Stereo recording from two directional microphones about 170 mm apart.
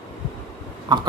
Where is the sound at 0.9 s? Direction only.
25° right (ahead or behind).